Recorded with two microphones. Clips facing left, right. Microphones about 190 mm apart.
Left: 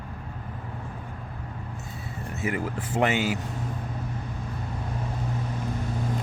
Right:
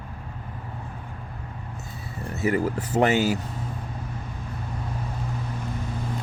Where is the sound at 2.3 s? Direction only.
35° right (ahead or behind).